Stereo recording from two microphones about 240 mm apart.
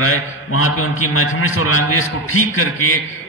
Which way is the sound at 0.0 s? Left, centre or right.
Left.